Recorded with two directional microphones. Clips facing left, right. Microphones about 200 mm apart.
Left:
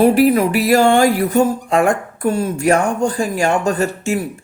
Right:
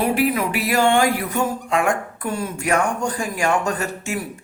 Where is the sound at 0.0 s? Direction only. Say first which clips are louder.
Left 8 dB; 40° left (ahead or behind).